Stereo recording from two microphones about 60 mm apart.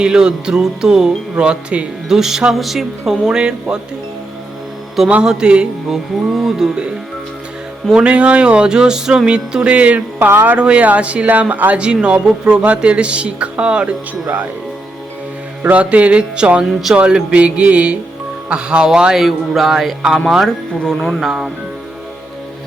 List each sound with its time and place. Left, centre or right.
0.0 s music: centre
2.0 s music: centre
5.0 s music: centre
6.3 s speech: centre
7.9 s music: centre
10.2 s speech: right
10.6 s speech: right
11.8 s music: centre
12.6 s speech: centre
15.6 s speech: right
18.4 s music: centre
19.2 s speech: centre
20.8 s speech: centre